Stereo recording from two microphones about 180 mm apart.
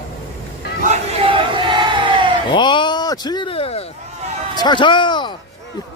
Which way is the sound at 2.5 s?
25° left (ahead or behind).